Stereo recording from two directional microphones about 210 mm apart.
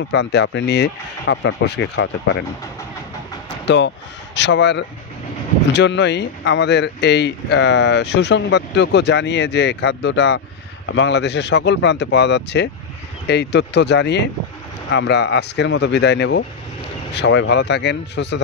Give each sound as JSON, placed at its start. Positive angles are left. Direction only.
{"t": 0.1, "sound": "speech", "side_deg": 55}
{"t": 3.6, "sound": "speech", "side_deg": 55}